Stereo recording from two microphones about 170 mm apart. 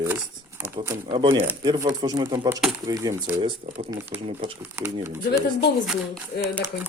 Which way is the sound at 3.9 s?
15° right (ahead or behind).